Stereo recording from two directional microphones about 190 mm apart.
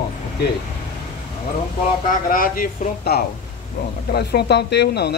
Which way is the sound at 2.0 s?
45° left (ahead or behind).